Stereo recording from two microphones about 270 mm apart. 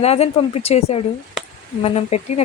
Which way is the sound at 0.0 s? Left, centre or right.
Left.